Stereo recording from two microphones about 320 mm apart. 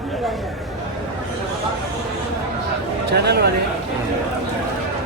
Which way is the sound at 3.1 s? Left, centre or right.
Right.